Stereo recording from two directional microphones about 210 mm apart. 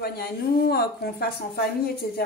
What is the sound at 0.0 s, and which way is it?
A woman's voice, 50° left (ahead or behind).